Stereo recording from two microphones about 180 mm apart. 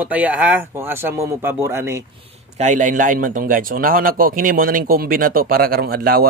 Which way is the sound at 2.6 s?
45° right (ahead or behind).